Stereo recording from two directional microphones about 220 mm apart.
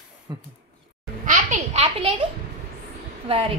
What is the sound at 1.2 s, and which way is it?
Speech, 35° right (ahead or behind).